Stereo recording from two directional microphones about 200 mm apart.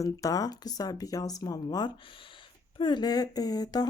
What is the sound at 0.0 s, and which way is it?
Speech, 15° left (ahead or behind).